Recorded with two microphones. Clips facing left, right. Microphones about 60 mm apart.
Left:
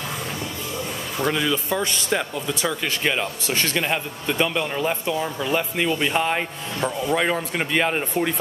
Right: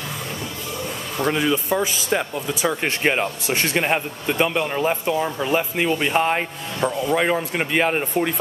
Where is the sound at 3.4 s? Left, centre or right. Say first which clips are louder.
Right 2 dB; centre.